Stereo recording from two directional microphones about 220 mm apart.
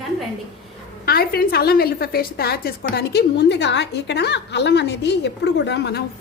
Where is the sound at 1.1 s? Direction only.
45° left (ahead or behind).